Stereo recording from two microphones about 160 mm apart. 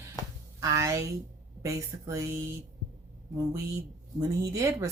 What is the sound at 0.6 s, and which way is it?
Speech, 20° right (ahead or behind).